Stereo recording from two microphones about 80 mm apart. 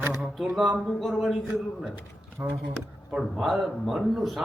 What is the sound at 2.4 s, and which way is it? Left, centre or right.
Speech, right.